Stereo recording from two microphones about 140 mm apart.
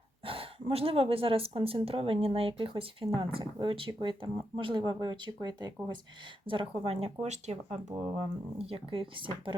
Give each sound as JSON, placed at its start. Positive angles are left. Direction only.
{"t": 0.3, "sound": "speech", "side_deg": -45}
{"t": 6.5, "sound": "speech", "side_deg": -40}